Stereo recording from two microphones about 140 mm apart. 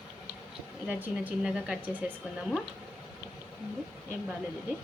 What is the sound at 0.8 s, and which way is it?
A woman's voice, 10° right (ahead or behind).